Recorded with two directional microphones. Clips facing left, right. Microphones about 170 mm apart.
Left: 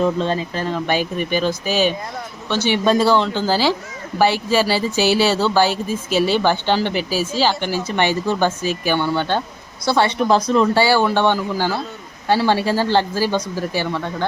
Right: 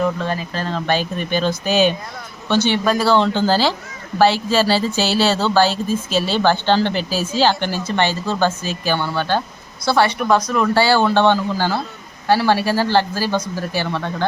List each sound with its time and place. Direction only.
0.0 s a man's voice: 25° left (ahead or behind); by 2.7 s 5° left (ahead or behind)
2.7 s speech: 25° left (ahead or behind)
3.1 s speech: 5° left (ahead or behind)